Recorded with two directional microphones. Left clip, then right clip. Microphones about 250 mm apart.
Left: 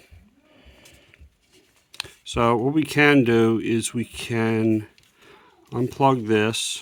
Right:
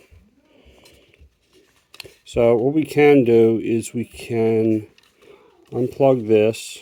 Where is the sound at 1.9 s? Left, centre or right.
Centre.